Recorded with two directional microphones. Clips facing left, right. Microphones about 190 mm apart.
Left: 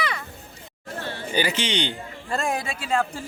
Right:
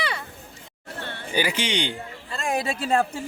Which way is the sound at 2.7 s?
35° right (ahead or behind).